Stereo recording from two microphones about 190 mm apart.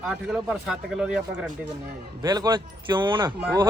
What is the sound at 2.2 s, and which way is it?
Speech, 20° right (ahead or behind).